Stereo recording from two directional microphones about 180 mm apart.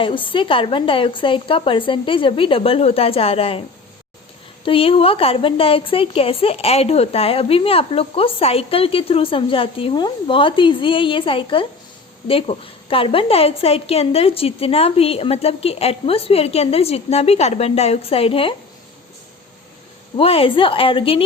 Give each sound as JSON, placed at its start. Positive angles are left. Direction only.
{"t": 0.0, "sound": "a woman's voice", "side_deg": 30}
{"t": 4.6, "sound": "a woman's voice", "side_deg": 30}
{"t": 20.1, "sound": "a woman's voice", "side_deg": 30}